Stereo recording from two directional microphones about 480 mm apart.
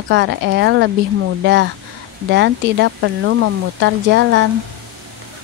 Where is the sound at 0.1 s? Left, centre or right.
Right.